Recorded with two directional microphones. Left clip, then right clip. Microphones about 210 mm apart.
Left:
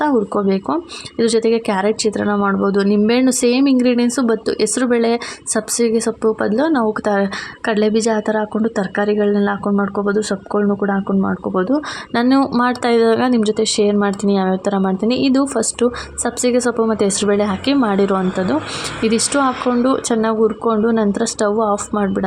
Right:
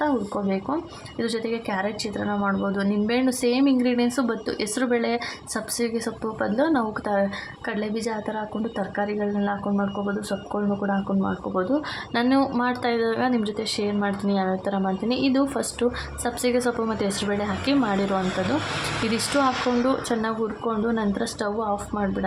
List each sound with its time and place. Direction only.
0.0 s a woman's voice: 30° left (ahead or behind)